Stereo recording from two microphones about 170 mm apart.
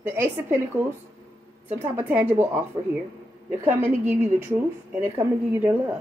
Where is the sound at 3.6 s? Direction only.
10° right (ahead or behind).